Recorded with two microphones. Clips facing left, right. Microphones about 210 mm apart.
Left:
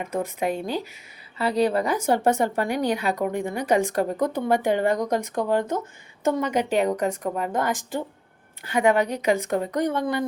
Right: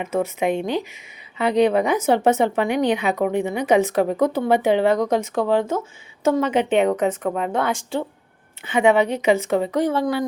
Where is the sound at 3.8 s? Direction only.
5° right (ahead or behind).